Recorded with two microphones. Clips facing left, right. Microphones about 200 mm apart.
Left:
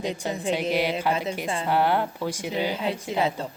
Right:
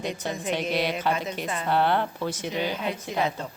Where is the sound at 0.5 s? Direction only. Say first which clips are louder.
Left 2 dB; 10° left (ahead or behind).